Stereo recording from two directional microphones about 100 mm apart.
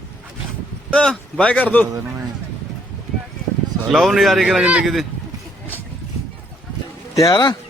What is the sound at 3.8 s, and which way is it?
Speech, centre (ahead or behind).